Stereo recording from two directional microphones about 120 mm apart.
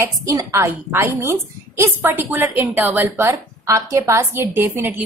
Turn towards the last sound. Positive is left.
turn(degrees=-15)  # may be behind; listen again after turning